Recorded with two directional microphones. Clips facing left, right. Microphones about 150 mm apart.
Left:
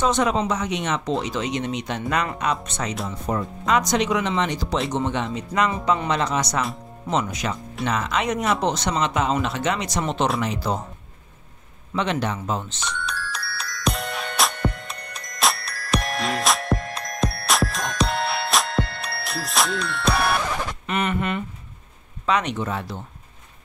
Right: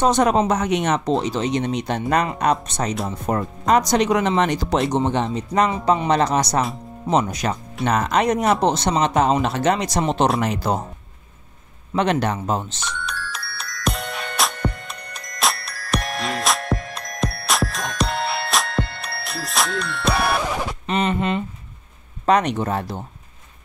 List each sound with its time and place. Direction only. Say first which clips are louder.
0.0 s speech: right 4 dB; 45° right (ahead or behind)
1.1 s speech: right 4 dB; 30° right (ahead or behind); by 4.8 s 50° right (ahead or behind)
4.9 s speech: right 4 dB; 35° right (ahead or behind)
10.4 s speech: right 3 dB; 45° right (ahead or behind)
11.9 s speech: right 4 dB; 45° right (ahead or behind)
12.8 s music: even; centre (ahead or behind)
20.8 s a sound: right 4 dB; 25° right (ahead or behind)
22.2 s speech: right 5 dB; 45° right (ahead or behind)